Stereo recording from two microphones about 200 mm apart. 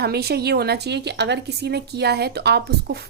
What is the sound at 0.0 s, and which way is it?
A woman's voice, 50° right (ahead or behind).